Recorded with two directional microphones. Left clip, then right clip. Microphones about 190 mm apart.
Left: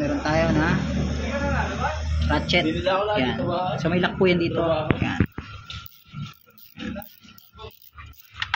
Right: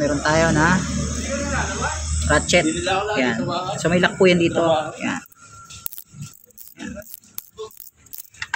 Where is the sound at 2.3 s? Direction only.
55° right (ahead or behind).